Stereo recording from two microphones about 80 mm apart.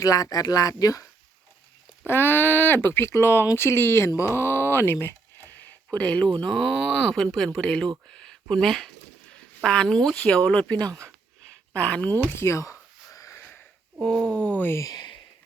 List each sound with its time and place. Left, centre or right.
0.0 s speech: left
2.0 s speech: left
4.2 s a sound: left
6.0 s speech: centre
8.1 s a sound: centre
9.6 s speech: centre
10.8 s speech: right
11.7 s speech: centre
12.3 s a sound: left
14.0 s speech: centre
14.8 s speech: left